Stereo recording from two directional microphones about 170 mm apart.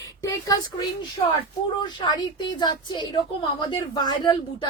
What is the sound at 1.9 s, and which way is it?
A woman's voice, 25° left (ahead or behind).